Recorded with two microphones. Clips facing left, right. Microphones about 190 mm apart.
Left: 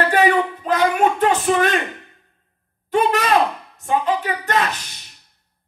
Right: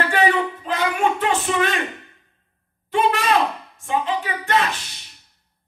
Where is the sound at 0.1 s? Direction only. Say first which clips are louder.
Left 3 dB; 40° left (ahead or behind).